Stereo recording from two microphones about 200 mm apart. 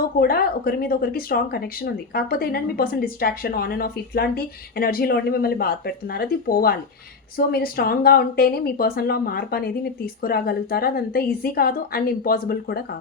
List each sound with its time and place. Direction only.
0.2 s speech: 50° left (ahead or behind)